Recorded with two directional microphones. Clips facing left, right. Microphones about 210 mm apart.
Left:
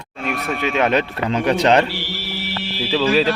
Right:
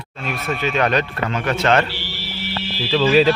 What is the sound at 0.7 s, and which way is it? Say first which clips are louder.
Speech: left 2 dB; 20° left (ahead or behind).